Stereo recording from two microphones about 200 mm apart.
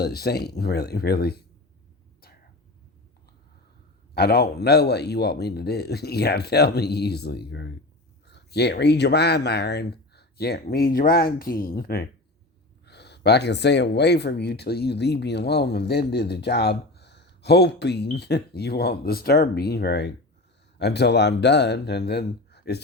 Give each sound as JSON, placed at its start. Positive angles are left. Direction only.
{"t": 0.0, "sound": "speech", "side_deg": 50}
{"t": 4.1, "sound": "speech", "side_deg": 50}